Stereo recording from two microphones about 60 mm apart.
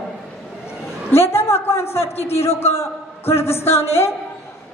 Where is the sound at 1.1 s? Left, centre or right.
Left.